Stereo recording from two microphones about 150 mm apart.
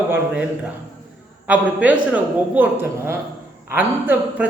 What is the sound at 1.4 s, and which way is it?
A woman's voice, 10° right (ahead or behind).